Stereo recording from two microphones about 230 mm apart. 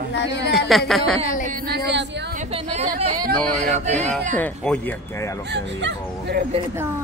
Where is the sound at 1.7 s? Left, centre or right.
Right.